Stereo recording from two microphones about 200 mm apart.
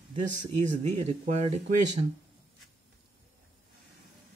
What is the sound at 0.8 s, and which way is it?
Speech, 35° right (ahead or behind).